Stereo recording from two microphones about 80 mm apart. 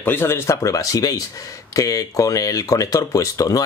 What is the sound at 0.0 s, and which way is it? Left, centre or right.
Speech, left.